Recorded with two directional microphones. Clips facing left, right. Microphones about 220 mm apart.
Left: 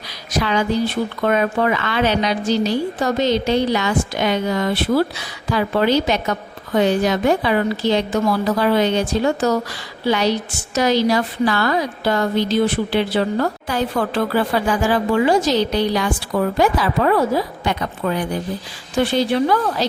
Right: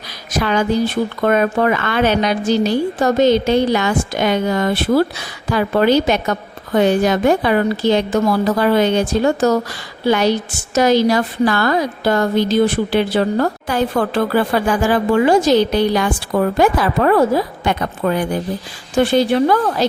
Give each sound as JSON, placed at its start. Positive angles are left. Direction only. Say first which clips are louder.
{"t": 0.3, "sound": "a woman's voice", "louder": "right 2 dB", "side_deg": -50}